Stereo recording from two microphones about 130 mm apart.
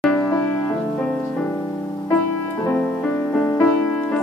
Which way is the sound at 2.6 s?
15° left (ahead or behind).